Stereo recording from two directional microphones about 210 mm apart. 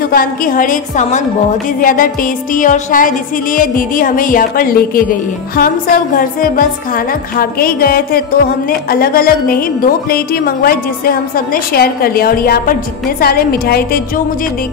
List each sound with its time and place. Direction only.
0.1 s music: 40° left (ahead or behind)
7.3 s a woman's voice: 45° left (ahead or behind)